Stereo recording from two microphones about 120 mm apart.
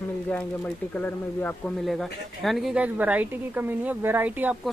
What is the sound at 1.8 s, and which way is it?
Speech, centre (ahead or behind).